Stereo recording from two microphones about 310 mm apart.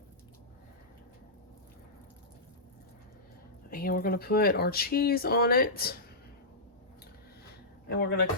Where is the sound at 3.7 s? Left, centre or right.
Left.